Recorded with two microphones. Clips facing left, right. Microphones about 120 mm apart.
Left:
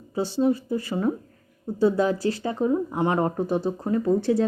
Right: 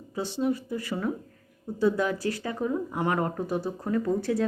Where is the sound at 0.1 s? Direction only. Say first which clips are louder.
Left 5 dB; 30° left (ahead or behind).